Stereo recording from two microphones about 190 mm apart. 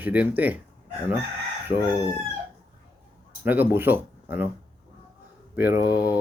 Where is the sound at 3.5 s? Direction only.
10° right (ahead or behind).